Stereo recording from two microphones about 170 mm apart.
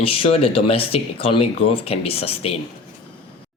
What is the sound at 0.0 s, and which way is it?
Speech, 30° left (ahead or behind).